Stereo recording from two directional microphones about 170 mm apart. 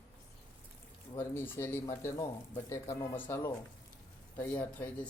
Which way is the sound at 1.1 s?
15° left (ahead or behind).